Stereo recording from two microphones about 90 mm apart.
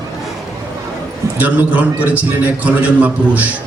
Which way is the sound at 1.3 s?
15° right (ahead or behind).